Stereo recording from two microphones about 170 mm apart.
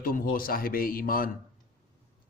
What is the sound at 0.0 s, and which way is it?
A man's voice, 55° left (ahead or behind).